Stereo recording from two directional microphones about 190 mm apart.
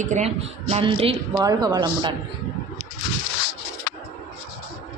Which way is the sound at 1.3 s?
20° right (ahead or behind).